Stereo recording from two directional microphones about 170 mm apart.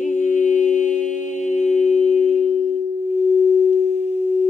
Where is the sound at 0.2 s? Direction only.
50° left (ahead or behind).